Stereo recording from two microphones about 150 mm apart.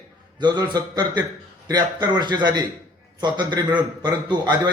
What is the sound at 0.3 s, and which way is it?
A man's voice, 30° right (ahead or behind).